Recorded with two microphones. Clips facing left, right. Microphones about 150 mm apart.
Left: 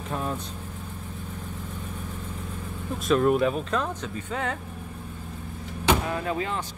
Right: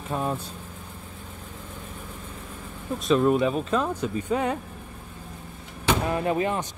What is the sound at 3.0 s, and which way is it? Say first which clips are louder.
Speech: right 1 dB; centre (ahead or behind).